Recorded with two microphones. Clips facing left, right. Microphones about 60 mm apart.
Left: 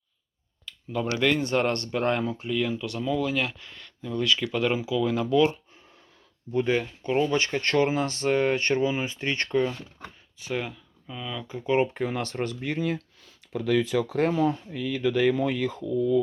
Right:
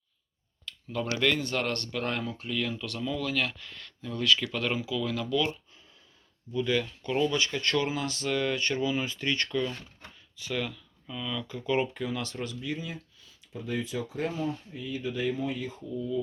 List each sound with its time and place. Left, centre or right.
0.6 s a sound: centre
1.4 s speech: left
2.4 s speech: centre
6.7 s speech: left